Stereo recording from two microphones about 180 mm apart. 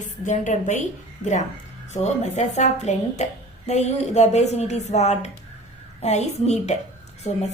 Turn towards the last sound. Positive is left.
turn(degrees=40)  # may be behind; listen again after turning